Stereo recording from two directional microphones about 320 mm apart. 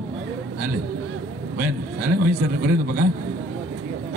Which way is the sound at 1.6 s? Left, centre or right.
Right.